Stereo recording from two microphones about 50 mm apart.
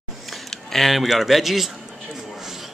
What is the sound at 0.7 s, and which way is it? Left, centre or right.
Speech, centre.